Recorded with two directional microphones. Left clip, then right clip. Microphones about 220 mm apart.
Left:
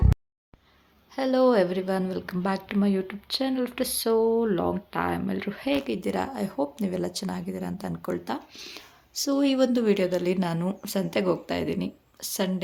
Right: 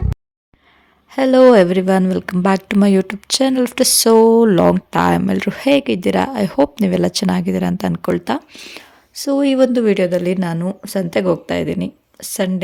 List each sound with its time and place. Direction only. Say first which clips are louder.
1.1 s a woman's voice: right 12 dB; 40° right (ahead or behind)